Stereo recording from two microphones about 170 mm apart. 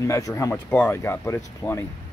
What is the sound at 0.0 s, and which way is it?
Speech, 15° left (ahead or behind).